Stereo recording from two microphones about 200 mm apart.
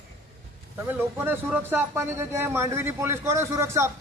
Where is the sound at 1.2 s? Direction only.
10° right (ahead or behind).